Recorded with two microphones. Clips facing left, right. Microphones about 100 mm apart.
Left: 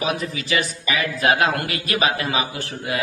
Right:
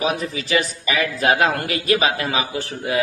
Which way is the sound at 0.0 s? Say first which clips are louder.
Right 2 dB; 40° right (ahead or behind).